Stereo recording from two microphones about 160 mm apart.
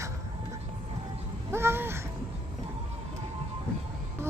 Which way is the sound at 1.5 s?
15° right (ahead or behind).